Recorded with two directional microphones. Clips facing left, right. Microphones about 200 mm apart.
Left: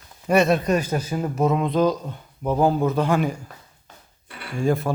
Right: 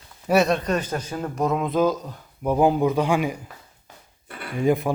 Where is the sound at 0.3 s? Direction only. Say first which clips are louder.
Left 1 dB; centre (ahead or behind).